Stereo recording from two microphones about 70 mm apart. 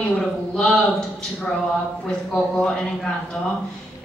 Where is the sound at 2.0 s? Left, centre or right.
Centre.